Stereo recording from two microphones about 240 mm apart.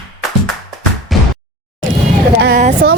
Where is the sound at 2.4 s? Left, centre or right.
Right.